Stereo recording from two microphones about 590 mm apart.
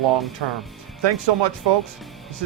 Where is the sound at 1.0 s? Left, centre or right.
Right.